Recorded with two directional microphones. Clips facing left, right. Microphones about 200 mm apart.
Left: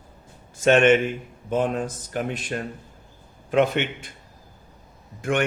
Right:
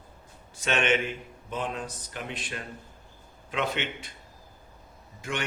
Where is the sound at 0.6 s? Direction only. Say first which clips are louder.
Left 10 dB; 50° left (ahead or behind).